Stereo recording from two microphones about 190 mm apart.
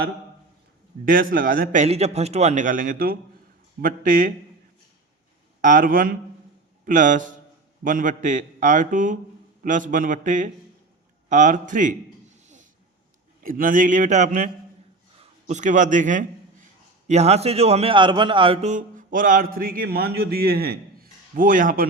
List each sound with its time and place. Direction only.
1.0 s a man's voice: 45° right (ahead or behind)
5.6 s a man's voice: 45° right (ahead or behind)
12.4 s a sound: 40° right (ahead or behind)
13.4 s a man's voice: 45° right (ahead or behind)